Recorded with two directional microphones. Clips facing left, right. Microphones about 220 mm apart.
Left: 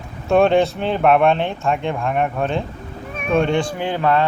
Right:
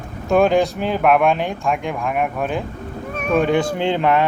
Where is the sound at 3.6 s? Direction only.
25° right (ahead or behind).